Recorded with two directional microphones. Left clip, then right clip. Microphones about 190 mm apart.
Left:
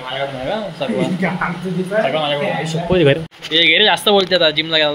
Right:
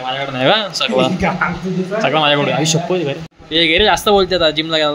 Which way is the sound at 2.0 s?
40° right (ahead or behind).